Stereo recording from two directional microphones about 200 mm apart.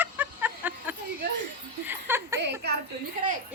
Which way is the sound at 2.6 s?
55° right (ahead or behind).